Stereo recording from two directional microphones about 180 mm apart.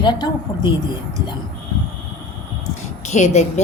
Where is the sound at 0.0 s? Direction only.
25° left (ahead or behind).